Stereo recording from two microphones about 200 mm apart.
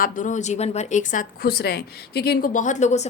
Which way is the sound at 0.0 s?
40° left (ahead or behind).